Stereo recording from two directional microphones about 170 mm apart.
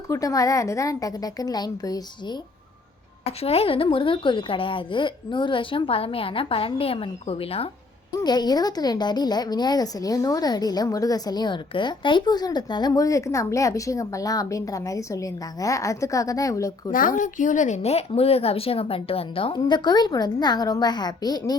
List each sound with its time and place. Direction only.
0.1 s a woman's voice: 20° left (ahead or behind)
3.2 s a woman's voice: 35° left (ahead or behind)
8.2 s a woman's voice: 25° left (ahead or behind)
16.9 s a woman's voice: 55° left (ahead or behind); by 21.5 s 20° left (ahead or behind)